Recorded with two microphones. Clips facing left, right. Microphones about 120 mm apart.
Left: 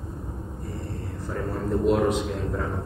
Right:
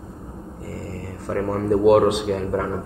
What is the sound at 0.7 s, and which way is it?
Speech, 90° right.